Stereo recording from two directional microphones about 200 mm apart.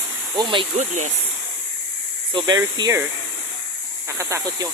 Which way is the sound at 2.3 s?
20° right (ahead or behind).